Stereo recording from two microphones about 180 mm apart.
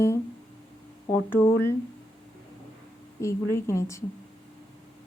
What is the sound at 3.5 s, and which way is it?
Speech, 15° left (ahead or behind).